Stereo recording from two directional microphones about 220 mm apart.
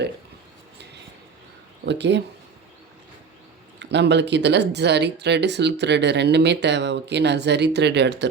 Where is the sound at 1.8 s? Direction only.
50° right (ahead or behind).